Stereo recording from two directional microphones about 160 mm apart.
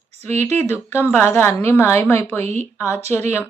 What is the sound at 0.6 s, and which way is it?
A woman's voice, 15° left (ahead or behind).